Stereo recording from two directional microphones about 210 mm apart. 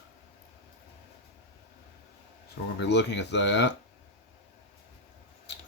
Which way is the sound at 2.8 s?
55° left (ahead or behind).